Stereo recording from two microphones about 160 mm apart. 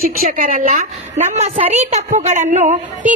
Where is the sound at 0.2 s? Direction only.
55° right (ahead or behind).